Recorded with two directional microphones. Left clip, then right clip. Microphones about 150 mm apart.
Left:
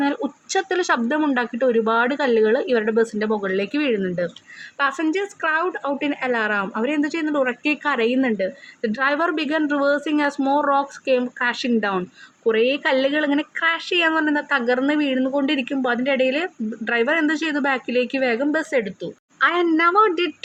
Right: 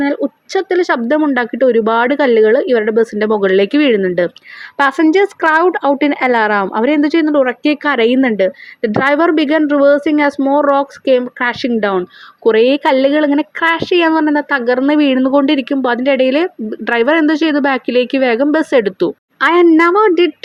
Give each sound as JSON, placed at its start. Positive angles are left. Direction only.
{"t": 0.0, "sound": "a woman's voice", "side_deg": -30}
{"t": 12.5, "sound": "a woman's voice", "side_deg": -50}
{"t": 18.8, "sound": "speech", "side_deg": -65}
{"t": 19.4, "sound": "a woman's voice", "side_deg": -40}